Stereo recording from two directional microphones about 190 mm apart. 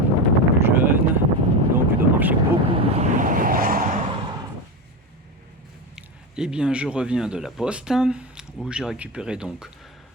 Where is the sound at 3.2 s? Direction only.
45° right (ahead or behind).